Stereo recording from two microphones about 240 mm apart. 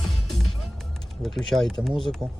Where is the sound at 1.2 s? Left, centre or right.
Centre.